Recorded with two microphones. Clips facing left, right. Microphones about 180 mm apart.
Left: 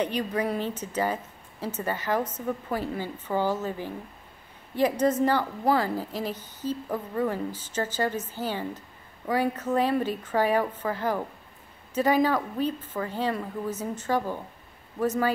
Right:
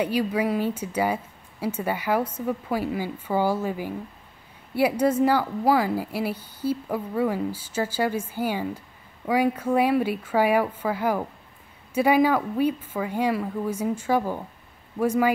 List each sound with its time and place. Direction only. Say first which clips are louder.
0.0 s a woman's voice: right 3 dB; 10° right (ahead or behind)